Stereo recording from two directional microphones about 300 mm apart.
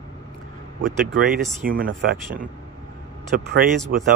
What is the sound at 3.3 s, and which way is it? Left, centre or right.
Speech, right.